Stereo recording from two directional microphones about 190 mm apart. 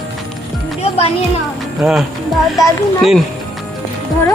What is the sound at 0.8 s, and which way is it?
Music, 30° left (ahead or behind).